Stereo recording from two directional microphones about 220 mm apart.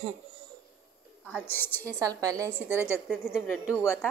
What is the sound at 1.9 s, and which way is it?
Speech, 15° right (ahead or behind).